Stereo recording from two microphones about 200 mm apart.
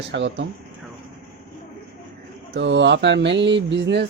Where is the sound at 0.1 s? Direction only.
65° right (ahead or behind).